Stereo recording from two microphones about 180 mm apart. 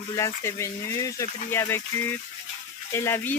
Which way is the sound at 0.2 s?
15° left (ahead or behind).